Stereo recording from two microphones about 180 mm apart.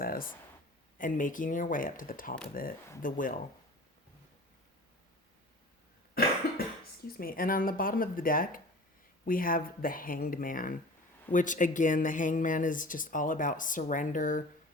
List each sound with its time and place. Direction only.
0.0 s a sound: 55° left (ahead or behind)
0.9 s speech: 45° left (ahead or behind)
6.2 s cough: 55° left (ahead or behind)
7.2 s speech: 50° left (ahead or behind)